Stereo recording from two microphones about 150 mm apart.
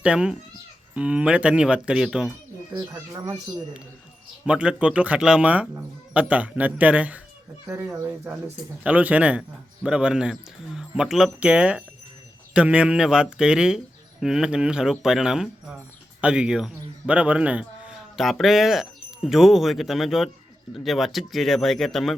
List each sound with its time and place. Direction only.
0.0 s speech: 5° right (ahead or behind)
2.7 s speech: 25° right (ahead or behind)
4.4 s speech: 5° right (ahead or behind)
7.7 s a man's voice: 20° right (ahead or behind); by 22.1 s centre (ahead or behind)